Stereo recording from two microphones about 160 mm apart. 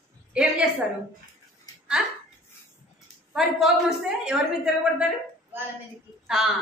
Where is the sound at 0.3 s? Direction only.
5° right (ahead or behind).